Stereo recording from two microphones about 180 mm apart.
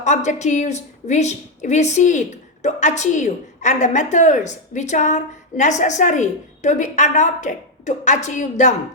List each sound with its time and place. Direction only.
0.0 s a woman's voice: 40° left (ahead or behind)